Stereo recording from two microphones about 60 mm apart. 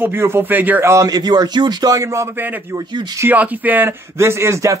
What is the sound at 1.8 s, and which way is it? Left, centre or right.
Speech, right.